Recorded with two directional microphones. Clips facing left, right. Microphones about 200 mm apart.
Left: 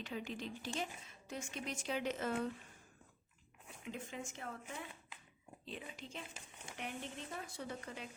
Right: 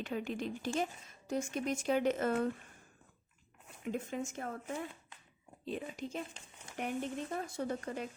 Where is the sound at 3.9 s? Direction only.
45° right (ahead or behind).